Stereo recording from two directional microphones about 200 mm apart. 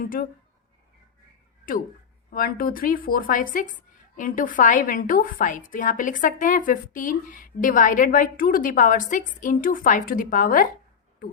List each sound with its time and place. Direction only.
0.0 s speech: 45° left (ahead or behind)
2.3 s a woman's voice: 45° left (ahead or behind)